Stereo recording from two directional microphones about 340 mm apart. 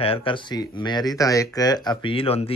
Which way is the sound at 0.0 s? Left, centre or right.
Centre.